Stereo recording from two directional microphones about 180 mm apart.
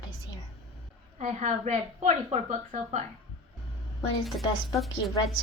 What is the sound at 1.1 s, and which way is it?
A woman's voice, 40° right (ahead or behind).